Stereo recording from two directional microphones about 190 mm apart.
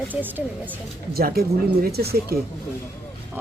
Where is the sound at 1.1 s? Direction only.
55° right (ahead or behind).